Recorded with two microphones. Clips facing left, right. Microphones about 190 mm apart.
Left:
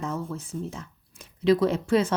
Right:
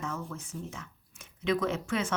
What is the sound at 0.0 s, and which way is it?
A woman's voice, 30° left (ahead or behind).